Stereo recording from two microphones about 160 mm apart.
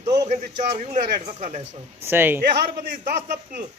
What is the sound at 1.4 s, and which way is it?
Speech, 40° right (ahead or behind).